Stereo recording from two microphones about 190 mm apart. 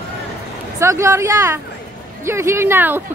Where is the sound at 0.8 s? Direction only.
15° right (ahead or behind).